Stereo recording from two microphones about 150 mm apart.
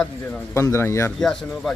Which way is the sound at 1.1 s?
Centre (ahead or behind).